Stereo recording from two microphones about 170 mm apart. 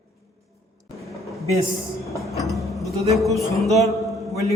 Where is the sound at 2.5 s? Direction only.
Centre (ahead or behind).